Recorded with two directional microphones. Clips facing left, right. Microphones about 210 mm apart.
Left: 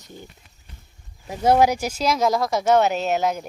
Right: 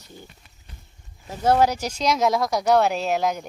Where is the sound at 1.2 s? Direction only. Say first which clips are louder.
Left 2 dB; 10° left (ahead or behind).